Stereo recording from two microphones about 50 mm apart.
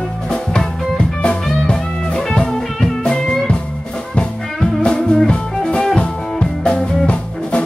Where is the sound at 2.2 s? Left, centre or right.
Centre.